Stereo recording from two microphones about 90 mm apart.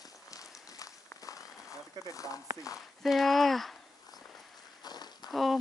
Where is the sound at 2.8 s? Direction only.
Centre (ahead or behind).